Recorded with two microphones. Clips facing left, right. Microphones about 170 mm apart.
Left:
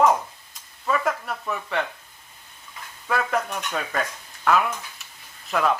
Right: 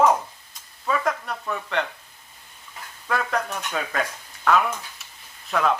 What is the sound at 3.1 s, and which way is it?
Speech, 5° left (ahead or behind).